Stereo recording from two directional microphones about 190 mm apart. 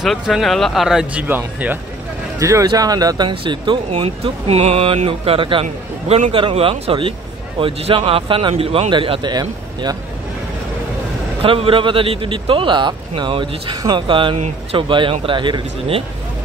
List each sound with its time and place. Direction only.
0.0 s speech: centre (ahead or behind); by 9.9 s 20° right (ahead or behind)
11.4 s speech: 30° right (ahead or behind)